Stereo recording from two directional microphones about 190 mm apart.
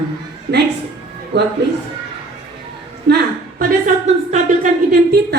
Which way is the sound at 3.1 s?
60° right (ahead or behind).